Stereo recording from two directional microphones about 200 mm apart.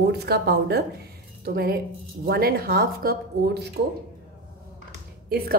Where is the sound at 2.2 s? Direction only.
50° right (ahead or behind).